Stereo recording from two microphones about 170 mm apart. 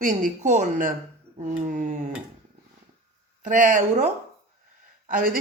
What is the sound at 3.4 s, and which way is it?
Speech, 50° right (ahead or behind).